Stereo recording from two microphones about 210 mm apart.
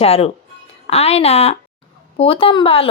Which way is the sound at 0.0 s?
30° left (ahead or behind).